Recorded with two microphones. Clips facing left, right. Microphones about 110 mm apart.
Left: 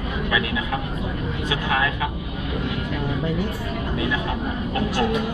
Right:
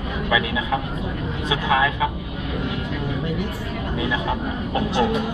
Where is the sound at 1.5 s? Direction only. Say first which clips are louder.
Right 4 dB; 15° right (ahead or behind).